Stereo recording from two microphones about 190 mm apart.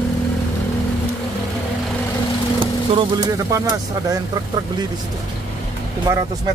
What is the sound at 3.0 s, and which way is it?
Speech, 15° right (ahead or behind).